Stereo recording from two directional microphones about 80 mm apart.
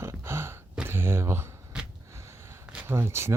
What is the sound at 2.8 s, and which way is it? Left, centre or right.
Speech, right.